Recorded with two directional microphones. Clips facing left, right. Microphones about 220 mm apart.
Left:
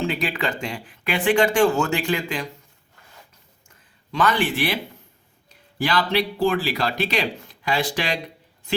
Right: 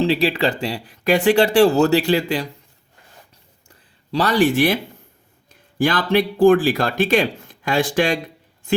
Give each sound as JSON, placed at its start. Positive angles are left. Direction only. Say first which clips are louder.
{"t": 0.0, "sound": "speech", "louder": "right 7 dB", "side_deg": -35}
{"t": 4.1, "sound": "speech", "louder": "right 5 dB", "side_deg": -35}